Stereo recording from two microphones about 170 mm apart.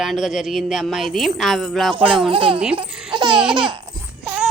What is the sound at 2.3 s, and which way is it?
Speech, 30° right (ahead or behind).